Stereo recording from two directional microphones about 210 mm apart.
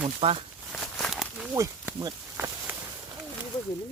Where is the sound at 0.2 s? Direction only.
25° right (ahead or behind).